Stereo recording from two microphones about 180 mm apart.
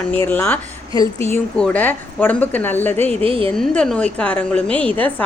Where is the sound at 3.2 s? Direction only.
30° right (ahead or behind).